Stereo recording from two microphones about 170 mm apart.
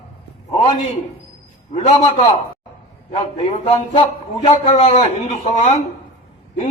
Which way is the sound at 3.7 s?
35° left (ahead or behind).